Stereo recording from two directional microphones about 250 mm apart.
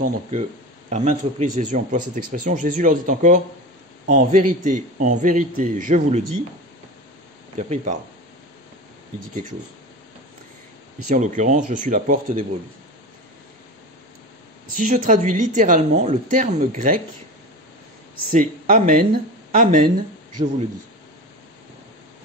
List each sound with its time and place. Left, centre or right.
0.0 s speech: right
7.5 s speech: right
11.1 s speech: right
14.7 s speech: right
18.3 s speech: right